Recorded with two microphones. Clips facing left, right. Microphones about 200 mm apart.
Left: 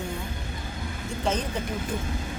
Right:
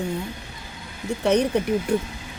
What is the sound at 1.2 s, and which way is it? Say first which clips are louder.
Speech: right 9 dB; 70° right (ahead or behind).